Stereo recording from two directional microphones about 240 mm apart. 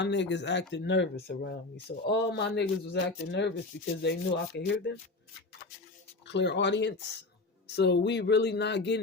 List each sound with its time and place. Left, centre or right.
0.0 s speech: left
4.0 s sanding: left
4.7 s speech: left
6.2 s speech: left